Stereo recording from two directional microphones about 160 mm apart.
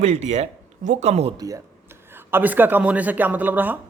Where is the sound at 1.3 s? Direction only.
25° right (ahead or behind).